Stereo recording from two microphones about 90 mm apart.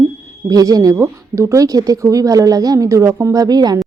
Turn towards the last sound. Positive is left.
turn(degrees=-50)  # may be behind; listen again after turning